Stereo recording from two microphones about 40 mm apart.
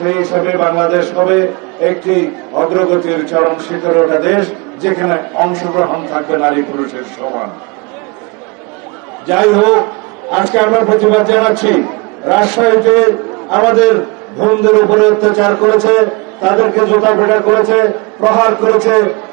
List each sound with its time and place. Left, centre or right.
0.0 s a man's voice: centre
9.2 s a man's voice: centre